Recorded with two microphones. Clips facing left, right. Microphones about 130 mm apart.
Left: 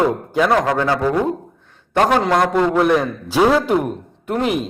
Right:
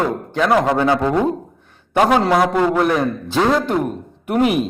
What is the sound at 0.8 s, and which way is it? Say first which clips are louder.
Speech: right 1 dB; 20° right (ahead or behind).